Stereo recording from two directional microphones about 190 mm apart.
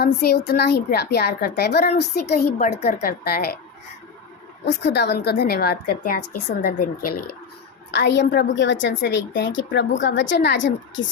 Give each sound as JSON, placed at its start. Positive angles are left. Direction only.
{"t": 0.0, "sound": "a woman's voice", "side_deg": 55}
{"t": 4.6, "sound": "a woman's voice", "side_deg": 60}
{"t": 7.9, "sound": "a woman's voice", "side_deg": 65}